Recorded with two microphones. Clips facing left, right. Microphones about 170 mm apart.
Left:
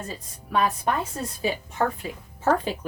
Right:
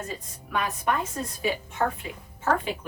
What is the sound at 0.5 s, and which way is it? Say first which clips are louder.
Speech: left 6 dB; 30° left (ahead or behind).